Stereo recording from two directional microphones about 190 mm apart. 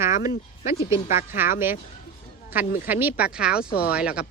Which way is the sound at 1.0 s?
45° left (ahead or behind).